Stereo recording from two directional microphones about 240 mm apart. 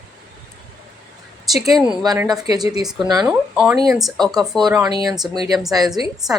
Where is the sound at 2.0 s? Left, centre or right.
Centre.